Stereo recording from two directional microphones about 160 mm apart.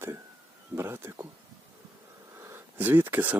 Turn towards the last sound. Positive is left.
turn(degrees=-10)  # may be behind; listen again after turning